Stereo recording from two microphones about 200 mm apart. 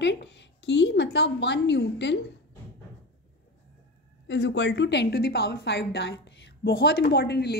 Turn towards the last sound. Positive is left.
turn(degrees=55)  # may be behind; listen again after turning